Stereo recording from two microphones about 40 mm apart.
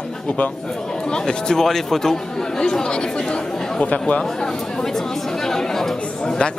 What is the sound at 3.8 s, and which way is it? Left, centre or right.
Speech, left.